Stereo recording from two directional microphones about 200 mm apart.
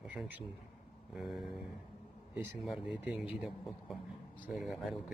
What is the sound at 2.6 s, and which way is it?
Speech, centre (ahead or behind).